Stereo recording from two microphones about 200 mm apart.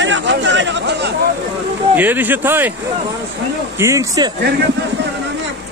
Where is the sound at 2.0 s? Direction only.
10° right (ahead or behind).